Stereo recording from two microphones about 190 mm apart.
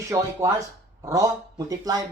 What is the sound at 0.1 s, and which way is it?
Speech, 15° right (ahead or behind).